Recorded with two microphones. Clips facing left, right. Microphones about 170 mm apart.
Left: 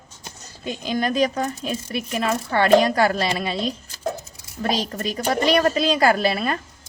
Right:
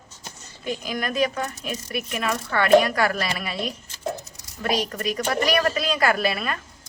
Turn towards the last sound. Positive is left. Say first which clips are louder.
# left 3 dB
turn(degrees=30)  # may be behind; listen again after turning